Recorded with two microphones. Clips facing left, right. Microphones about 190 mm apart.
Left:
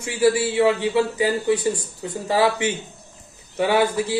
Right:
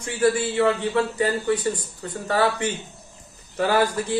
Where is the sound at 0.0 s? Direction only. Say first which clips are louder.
Left 2 dB; 5° left (ahead or behind).